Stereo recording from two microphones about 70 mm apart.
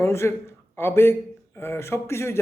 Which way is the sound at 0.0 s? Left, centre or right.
Left.